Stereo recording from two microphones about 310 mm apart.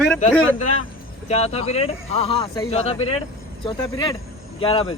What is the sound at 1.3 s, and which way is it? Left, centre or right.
A man's voice, centre.